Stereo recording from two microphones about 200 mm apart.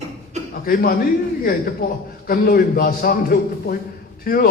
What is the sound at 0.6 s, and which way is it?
A man's voice, 45° left (ahead or behind).